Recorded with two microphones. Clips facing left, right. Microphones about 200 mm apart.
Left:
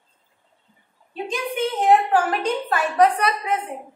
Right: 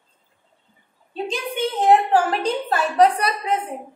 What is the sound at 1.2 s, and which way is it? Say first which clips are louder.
A woman's voice: even; 30° right (ahead or behind).